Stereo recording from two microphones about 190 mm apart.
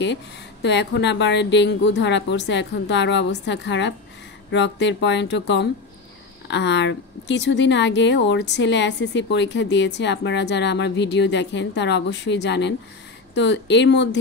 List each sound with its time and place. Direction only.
0.0 s speech: 65° left (ahead or behind)